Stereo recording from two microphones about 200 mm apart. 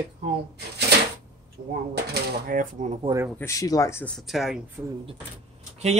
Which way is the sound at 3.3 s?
15° left (ahead or behind).